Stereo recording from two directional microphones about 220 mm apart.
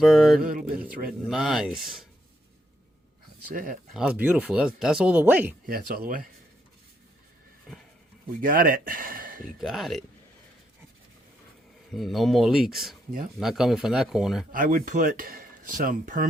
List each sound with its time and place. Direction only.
0.0 s speech: centre (ahead or behind)
0.4 s speech: 40° right (ahead or behind)
1.3 s speech: 5° right (ahead or behind)
3.5 s speech: 40° right (ahead or behind)
3.9 s speech: 5° right (ahead or behind)
5.6 s speech: 40° right (ahead or behind)
8.4 s speech: 40° right (ahead or behind)
9.6 s speech: centre (ahead or behind)
11.9 s speech: centre (ahead or behind)
14.5 s speech: 40° right (ahead or behind)